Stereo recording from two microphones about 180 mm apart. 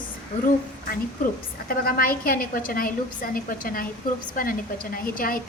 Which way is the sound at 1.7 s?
50° left (ahead or behind).